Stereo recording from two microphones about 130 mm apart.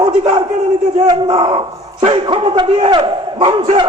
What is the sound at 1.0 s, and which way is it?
Speech, 30° right (ahead or behind).